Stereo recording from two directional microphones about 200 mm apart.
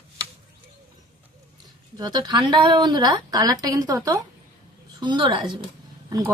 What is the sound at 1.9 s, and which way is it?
A woman's voice, 20° right (ahead or behind).